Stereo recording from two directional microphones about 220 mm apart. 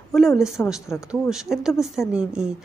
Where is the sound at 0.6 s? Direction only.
10° left (ahead or behind).